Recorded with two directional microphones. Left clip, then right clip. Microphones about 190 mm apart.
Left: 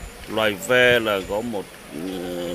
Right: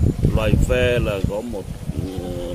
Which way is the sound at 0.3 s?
15° left (ahead or behind).